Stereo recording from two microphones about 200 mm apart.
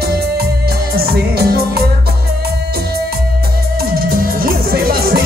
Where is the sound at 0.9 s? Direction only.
50° right (ahead or behind).